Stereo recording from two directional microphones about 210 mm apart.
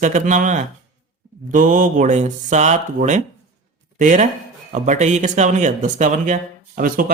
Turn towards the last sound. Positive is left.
turn(degrees=-40)  # may be behind; listen again after turning